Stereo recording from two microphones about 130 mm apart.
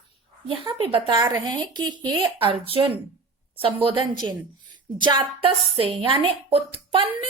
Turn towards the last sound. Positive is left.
turn(degrees=-40)  # may be behind; listen again after turning